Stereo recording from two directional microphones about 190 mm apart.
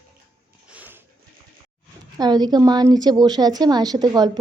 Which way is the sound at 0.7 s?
10° right (ahead or behind).